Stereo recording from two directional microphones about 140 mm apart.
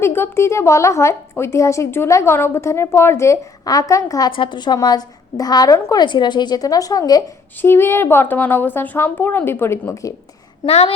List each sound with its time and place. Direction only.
0.0 s a woman's voice: 15° left (ahead or behind)
4.3 s a woman's voice: 35° left (ahead or behind); by 10.1 s 20° left (ahead or behind)
10.7 s a child's voice: 45° left (ahead or behind)